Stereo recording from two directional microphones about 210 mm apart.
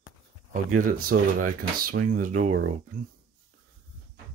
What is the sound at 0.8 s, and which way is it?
Speech, 40° right (ahead or behind).